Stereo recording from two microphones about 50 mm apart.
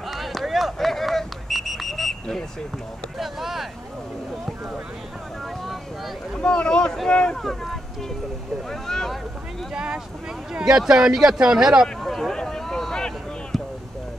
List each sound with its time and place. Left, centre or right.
0.1 s a sound: centre
3.2 s speech: centre
6.4 s speech: centre
7.4 s speech: centre
10.5 s speech: centre
12.0 s speech: centre
13.5 s a sound: centre